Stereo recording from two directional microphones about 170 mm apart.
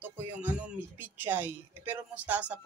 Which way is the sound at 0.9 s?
10° right (ahead or behind).